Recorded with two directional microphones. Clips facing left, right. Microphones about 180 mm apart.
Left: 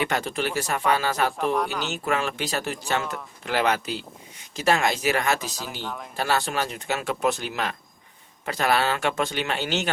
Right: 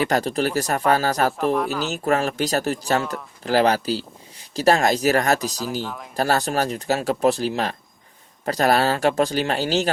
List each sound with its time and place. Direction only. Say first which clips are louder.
0.0 s speech: right 5 dB; 40° right (ahead or behind)
1.5 s speech: right 3 dB; 5° right (ahead or behind)
1.9 s speech: right 5 dB; 40° right (ahead or behind)
5.8 s speech: right 2 dB; centre (ahead or behind)
6.1 s speech: right 5 dB; 40° right (ahead or behind)